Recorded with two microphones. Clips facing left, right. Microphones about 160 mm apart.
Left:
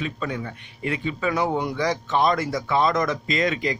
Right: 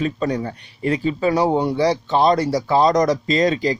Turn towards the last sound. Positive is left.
turn(degrees=-35)  # may be behind; listen again after turning